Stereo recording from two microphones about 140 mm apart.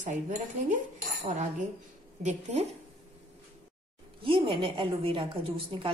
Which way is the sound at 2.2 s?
55° right (ahead or behind).